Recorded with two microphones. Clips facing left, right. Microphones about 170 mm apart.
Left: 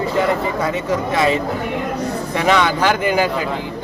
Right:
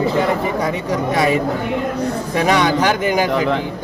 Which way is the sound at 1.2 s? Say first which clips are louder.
Right 2 dB; 15° right (ahead or behind).